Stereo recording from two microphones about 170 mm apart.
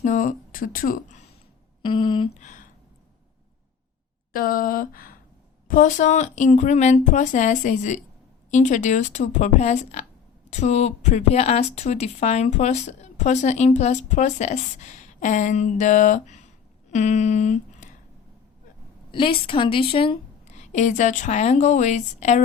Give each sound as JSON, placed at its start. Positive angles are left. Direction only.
{"t": 0.0, "sound": "speech", "side_deg": 50}
{"t": 1.8, "sound": "speech", "side_deg": 30}
{"t": 2.4, "sound": "speech", "side_deg": 45}
{"t": 4.3, "sound": "a sound", "side_deg": 55}
{"t": 5.6, "sound": "speech", "side_deg": 50}
{"t": 19.1, "sound": "a woman's voice", "side_deg": 30}
{"t": 20.5, "sound": "speech", "side_deg": 45}